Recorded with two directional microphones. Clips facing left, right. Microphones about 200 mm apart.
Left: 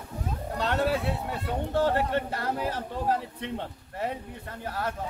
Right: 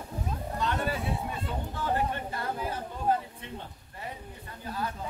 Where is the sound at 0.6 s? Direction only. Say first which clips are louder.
Left 5 dB; 75° left (ahead or behind).